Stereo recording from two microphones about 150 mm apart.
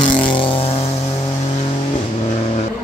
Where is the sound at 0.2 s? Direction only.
35° left (ahead or behind).